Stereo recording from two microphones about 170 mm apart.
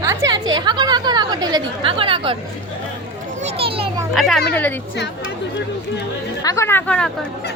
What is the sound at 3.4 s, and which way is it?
Children playing, 35° right (ahead or behind).